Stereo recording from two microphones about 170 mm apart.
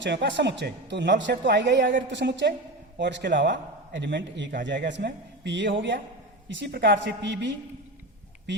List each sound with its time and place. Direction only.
0.0 s a man's voice: 90° right